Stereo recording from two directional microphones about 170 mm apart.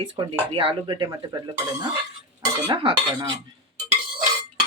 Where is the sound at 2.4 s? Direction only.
25° right (ahead or behind).